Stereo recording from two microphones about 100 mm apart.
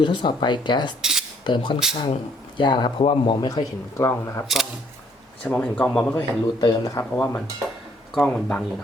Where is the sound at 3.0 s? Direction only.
70° left (ahead or behind).